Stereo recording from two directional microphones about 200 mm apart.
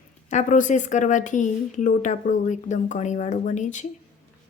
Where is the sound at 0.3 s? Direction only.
40° left (ahead or behind).